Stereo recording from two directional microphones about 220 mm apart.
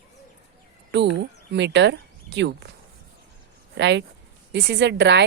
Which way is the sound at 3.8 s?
50° right (ahead or behind).